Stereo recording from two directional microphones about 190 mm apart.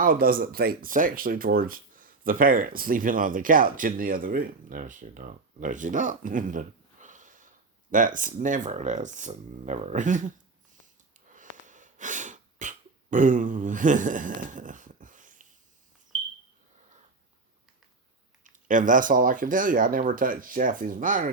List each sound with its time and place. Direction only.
0.0 s speech: 50° right (ahead or behind)
11.3 s sneeze: 40° right (ahead or behind)
18.4 s speech: 45° right (ahead or behind)